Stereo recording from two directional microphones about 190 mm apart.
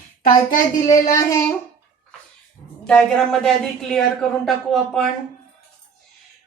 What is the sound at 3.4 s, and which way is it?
A woman's voice, centre (ahead or behind).